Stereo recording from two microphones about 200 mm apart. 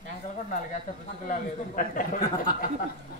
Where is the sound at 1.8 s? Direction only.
45° left (ahead or behind).